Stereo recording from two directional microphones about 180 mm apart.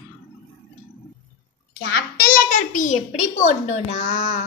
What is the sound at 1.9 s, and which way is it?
A child's voice, 50° left (ahead or behind).